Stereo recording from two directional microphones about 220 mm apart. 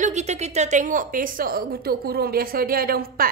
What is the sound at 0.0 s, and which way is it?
A woman's voice, 30° right (ahead or behind).